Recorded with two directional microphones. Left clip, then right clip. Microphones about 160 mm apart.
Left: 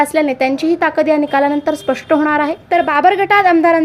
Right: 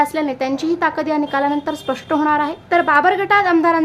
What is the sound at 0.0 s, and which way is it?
A woman's voice, 20° left (ahead or behind).